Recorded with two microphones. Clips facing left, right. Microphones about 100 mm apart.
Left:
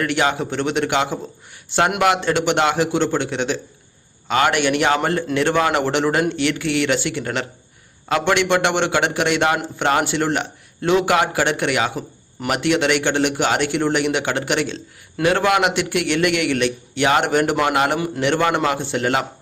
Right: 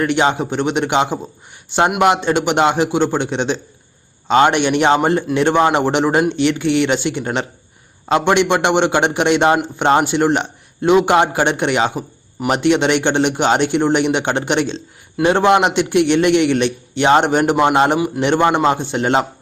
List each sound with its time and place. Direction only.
0.0 s a man's voice: 25° right (ahead or behind)